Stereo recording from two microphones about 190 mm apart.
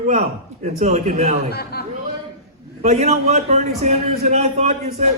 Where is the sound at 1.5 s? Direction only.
55° left (ahead or behind).